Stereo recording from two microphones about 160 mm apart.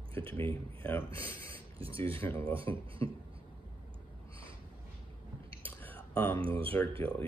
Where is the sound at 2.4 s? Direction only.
35° right (ahead or behind).